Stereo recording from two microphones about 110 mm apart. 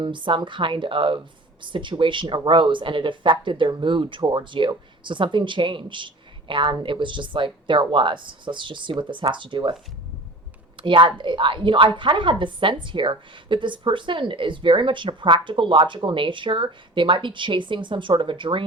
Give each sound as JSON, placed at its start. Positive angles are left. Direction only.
{"t": 0.0, "sound": "speech", "side_deg": -45}
{"t": 10.8, "sound": "speech", "side_deg": -50}